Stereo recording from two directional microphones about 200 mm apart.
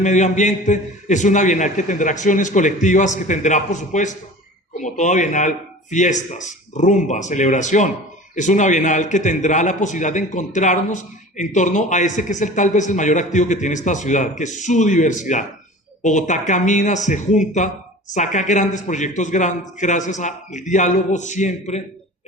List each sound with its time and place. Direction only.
0.0 s a man's voice: 35° left (ahead or behind)